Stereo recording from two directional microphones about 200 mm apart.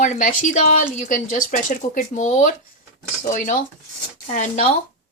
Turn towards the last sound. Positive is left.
turn(degrees=35)  # may be behind; listen again after turning